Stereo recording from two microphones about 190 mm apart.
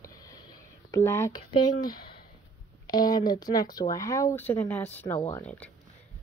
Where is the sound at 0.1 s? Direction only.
20° left (ahead or behind).